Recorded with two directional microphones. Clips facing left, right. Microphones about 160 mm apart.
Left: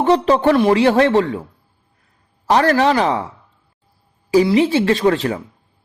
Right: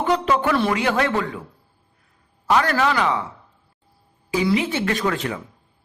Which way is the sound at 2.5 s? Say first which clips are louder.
Left 5 dB; 35° left (ahead or behind).